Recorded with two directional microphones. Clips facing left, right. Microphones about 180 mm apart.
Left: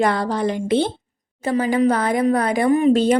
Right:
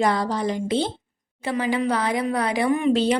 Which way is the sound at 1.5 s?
40° left (ahead or behind).